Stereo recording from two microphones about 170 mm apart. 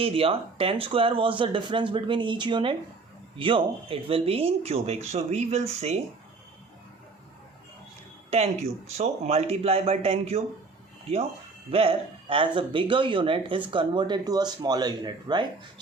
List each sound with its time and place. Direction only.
0.0 s speech: 35° right (ahead or behind)
8.3 s speech: 40° right (ahead or behind)
11.7 s speech: 35° right (ahead or behind)